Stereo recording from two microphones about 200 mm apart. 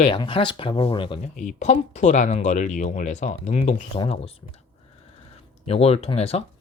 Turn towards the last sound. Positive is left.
turn(degrees=30)  # may be behind; listen again after turning